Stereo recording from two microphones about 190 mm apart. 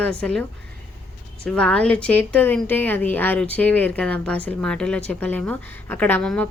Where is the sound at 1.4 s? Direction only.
5° left (ahead or behind).